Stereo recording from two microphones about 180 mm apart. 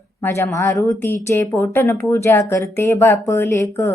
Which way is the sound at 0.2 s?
15° left (ahead or behind).